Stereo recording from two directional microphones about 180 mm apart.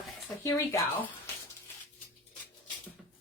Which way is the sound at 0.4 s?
15° left (ahead or behind).